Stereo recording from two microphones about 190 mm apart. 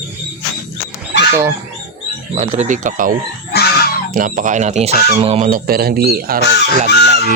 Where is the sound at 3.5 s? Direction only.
55° left (ahead or behind).